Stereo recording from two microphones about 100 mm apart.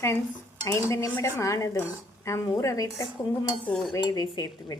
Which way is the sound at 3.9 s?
40° left (ahead or behind).